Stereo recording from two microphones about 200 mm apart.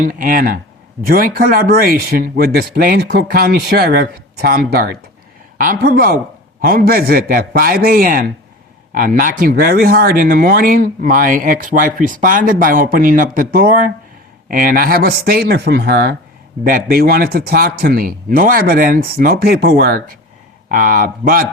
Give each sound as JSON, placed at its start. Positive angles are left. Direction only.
{"t": 0.0, "sound": "speech", "side_deg": -45}